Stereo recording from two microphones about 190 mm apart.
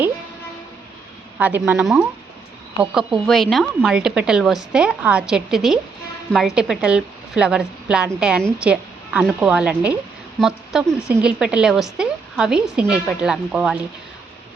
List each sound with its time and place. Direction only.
1.4 s speech: 10° right (ahead or behind)
3.2 s a woman's voice: centre (ahead or behind)